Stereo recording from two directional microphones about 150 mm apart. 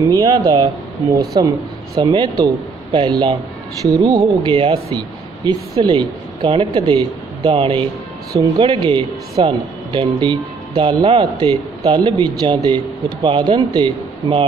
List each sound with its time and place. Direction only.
0.1 s a man's voice: 30° right (ahead or behind)